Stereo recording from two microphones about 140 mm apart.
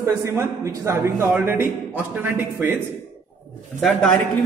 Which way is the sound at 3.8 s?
5° left (ahead or behind).